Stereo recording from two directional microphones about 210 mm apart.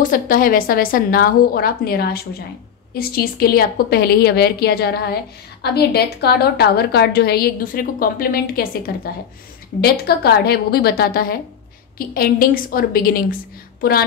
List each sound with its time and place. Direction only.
0.0 s a woman's voice: 40° left (ahead or behind)